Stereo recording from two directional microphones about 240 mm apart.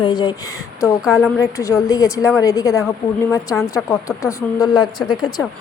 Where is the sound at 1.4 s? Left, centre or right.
Centre.